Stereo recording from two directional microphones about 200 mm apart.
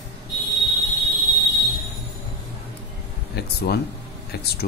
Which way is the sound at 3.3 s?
55° left (ahead or behind).